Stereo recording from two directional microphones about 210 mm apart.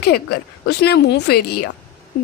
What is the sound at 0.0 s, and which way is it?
A woman's voice, 50° left (ahead or behind).